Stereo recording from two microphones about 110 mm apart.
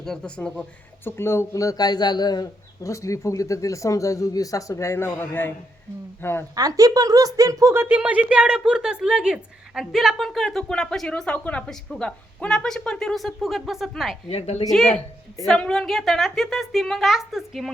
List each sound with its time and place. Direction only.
0.0 s speech: 5° left (ahead or behind)
1.0 s speech: 25° left (ahead or behind)
6.6 s speech: 35° right (ahead or behind)
7.8 s speech: 15° right (ahead or behind); by 14.2 s centre (ahead or behind)
14.3 s a woman's voice: 75° left (ahead or behind)
14.7 s speech: 5° left (ahead or behind)